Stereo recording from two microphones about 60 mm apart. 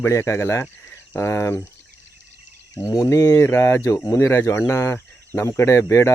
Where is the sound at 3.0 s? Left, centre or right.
Left.